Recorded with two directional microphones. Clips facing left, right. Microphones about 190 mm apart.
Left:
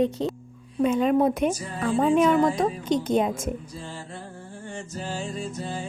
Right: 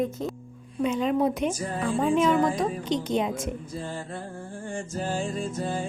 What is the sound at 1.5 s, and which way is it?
Music, 50° right (ahead or behind).